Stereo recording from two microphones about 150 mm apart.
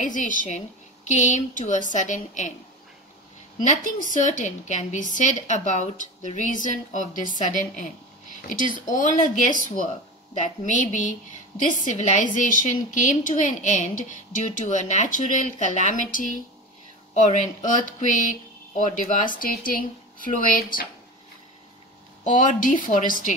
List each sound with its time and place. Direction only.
0.0 s a woman's voice: 60° left (ahead or behind)
3.5 s a woman's voice: 55° left (ahead or behind); by 20.9 s 75° left (ahead or behind)
22.2 s a woman's voice: 60° left (ahead or behind)